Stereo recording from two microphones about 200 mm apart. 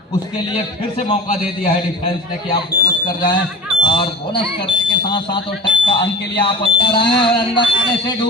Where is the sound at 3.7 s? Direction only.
25° left (ahead or behind).